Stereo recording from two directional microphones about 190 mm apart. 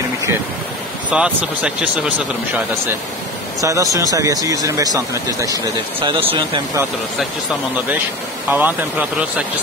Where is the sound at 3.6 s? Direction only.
15° right (ahead or behind).